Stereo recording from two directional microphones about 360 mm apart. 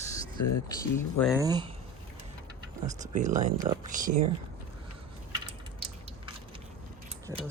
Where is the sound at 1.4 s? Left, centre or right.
Centre.